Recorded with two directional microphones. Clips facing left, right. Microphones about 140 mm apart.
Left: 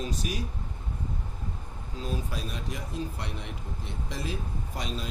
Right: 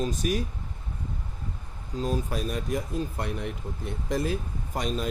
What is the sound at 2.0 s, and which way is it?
Speech, 45° right (ahead or behind).